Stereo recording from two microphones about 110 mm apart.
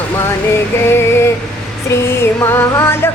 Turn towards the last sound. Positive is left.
turn(degrees=20)  # may be behind; listen again after turning